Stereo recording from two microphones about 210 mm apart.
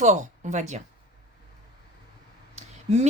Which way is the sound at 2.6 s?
35° right (ahead or behind).